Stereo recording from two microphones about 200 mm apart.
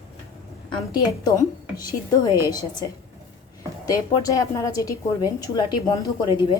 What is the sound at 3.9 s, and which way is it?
A woman's voice, 15° left (ahead or behind).